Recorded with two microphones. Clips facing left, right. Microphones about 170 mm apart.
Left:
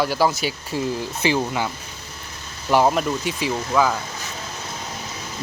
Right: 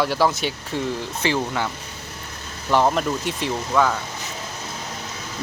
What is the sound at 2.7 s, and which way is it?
Speech, 10° left (ahead or behind).